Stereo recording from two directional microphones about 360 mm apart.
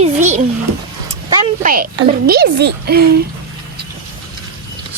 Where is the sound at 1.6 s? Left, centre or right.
Right.